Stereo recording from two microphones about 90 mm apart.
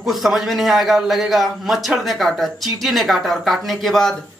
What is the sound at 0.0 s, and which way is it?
Speech, centre (ahead or behind).